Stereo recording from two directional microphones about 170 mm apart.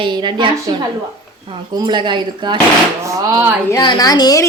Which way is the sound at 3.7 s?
25° left (ahead or behind).